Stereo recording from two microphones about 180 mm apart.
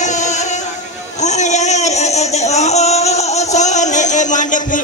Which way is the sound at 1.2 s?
40° left (ahead or behind).